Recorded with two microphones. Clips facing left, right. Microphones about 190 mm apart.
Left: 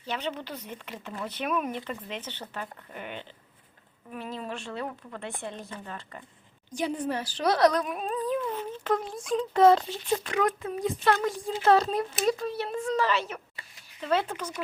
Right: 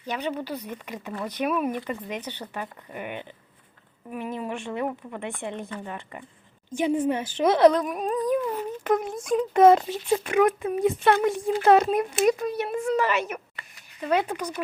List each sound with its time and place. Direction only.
0.0 s speech: 10° right (ahead or behind)